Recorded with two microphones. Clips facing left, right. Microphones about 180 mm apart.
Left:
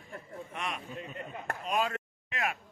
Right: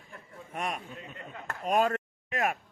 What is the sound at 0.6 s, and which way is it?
Speech, 45° right (ahead or behind).